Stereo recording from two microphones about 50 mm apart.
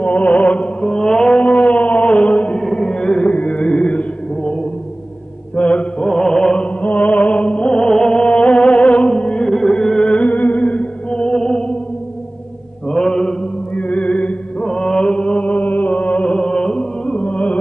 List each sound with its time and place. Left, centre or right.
0.0 s mantra: left
2.5 s music: centre
5.6 s chant: left
6.8 s music: left
12.9 s mantra: centre
13.7 s music: left